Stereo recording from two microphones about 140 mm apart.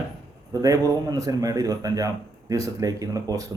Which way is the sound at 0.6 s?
25° right (ahead or behind).